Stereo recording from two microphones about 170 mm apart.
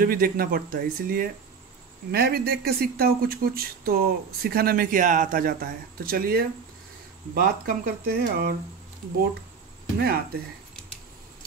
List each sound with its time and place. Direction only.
0.0 s speech: 60° right (ahead or behind)
9.9 s speech: 65° right (ahead or behind)